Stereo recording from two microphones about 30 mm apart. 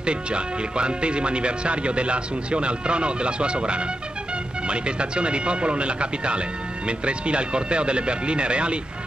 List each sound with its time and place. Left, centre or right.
0.0 s speech: right